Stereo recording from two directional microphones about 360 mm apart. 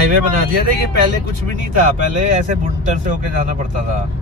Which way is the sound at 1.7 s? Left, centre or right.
Centre.